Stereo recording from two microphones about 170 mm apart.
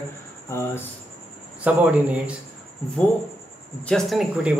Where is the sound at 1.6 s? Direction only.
10° right (ahead or behind).